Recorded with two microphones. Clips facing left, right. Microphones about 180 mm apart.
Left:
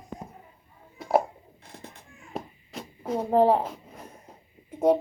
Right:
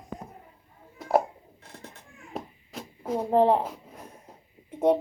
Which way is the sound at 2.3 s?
Centre (ahead or behind).